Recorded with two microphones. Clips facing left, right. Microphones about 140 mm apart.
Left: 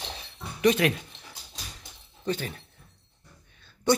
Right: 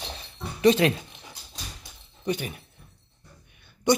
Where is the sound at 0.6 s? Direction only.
30° right (ahead or behind).